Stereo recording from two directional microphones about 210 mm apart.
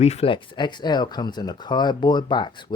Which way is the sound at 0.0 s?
30° left (ahead or behind).